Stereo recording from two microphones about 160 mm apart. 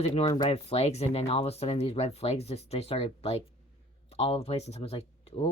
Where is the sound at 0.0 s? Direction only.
35° left (ahead or behind).